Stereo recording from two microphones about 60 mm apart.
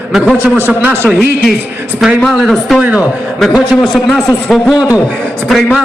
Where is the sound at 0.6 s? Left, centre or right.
Right.